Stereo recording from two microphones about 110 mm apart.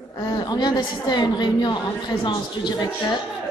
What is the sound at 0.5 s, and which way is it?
A woman's voice, 40° left (ahead or behind).